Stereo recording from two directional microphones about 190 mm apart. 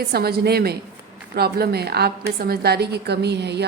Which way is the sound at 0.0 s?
55° right (ahead or behind).